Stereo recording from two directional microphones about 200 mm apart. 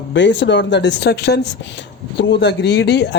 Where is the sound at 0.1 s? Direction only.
65° left (ahead or behind).